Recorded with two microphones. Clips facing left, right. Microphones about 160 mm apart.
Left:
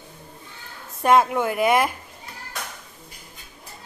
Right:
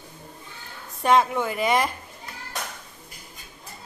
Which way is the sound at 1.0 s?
10° left (ahead or behind).